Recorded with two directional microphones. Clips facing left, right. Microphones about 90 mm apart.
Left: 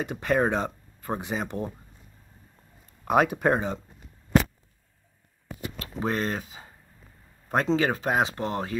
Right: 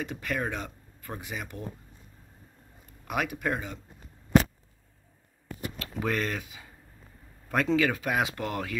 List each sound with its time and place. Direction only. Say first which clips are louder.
0.0 s speech: left 7 dB; 25° left (ahead or behind)
3.1 s speech: left 8 dB; 35° left (ahead or behind)
5.8 s speech: left 2 dB; 30° left (ahead or behind)